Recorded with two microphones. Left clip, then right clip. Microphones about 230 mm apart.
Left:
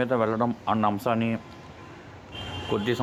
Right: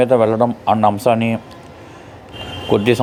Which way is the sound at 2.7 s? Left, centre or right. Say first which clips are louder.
Right 13 dB; centre.